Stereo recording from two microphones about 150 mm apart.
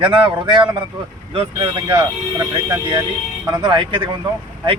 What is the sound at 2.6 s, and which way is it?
Speech, 15° right (ahead or behind).